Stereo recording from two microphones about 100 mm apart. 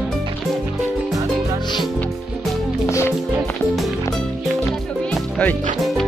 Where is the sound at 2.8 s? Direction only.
30° left (ahead or behind).